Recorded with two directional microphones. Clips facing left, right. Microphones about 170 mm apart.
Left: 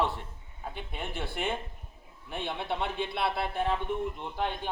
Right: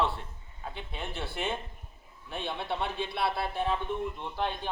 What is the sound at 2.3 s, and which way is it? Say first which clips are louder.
A man's voice: left 1 dB; 15° left (ahead or behind).